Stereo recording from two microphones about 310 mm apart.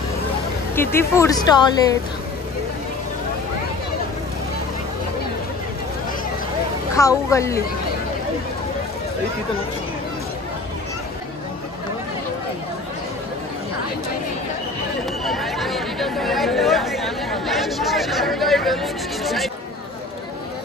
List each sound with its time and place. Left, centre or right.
0.7 s speech: centre
7.0 s speech: centre
15.2 s chatter: centre